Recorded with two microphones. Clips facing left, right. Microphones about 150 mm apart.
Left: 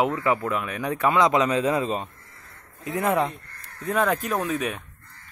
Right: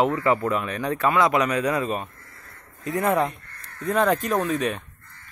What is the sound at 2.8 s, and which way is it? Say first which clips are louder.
Speech: right 1 dB; 5° left (ahead or behind).